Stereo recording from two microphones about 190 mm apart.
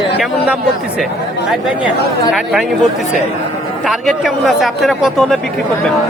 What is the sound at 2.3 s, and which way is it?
Speech, centre (ahead or behind).